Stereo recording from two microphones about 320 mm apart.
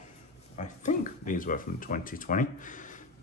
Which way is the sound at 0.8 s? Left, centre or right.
Left.